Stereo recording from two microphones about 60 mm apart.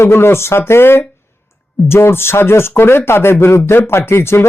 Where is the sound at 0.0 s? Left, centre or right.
Left.